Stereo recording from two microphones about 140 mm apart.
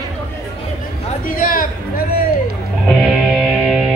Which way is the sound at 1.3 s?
90° left.